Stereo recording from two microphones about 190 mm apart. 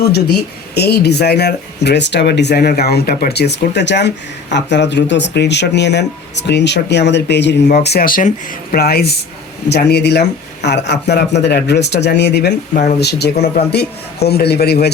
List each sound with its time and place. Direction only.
0.7 s speech: 60° left (ahead or behind)